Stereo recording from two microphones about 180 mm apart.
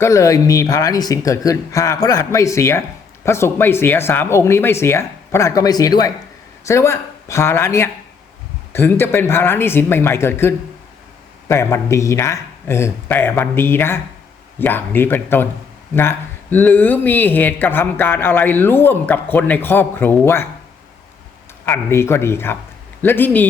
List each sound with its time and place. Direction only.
0.0 s speech: 15° left (ahead or behind)
21.7 s speech: 15° left (ahead or behind)